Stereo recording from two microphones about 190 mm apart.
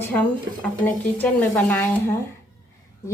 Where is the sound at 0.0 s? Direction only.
10° left (ahead or behind).